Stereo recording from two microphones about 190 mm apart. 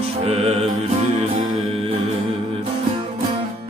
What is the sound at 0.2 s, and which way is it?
Music, 30° right (ahead or behind).